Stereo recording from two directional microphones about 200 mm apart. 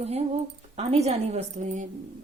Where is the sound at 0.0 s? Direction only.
30° right (ahead or behind).